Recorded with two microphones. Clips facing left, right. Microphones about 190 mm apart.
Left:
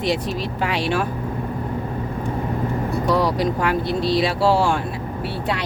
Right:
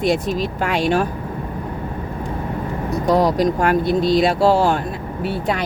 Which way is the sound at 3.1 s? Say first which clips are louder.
Right 5 dB; 45° right (ahead or behind).